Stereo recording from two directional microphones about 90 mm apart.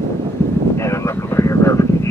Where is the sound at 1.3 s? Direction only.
30° left (ahead or behind).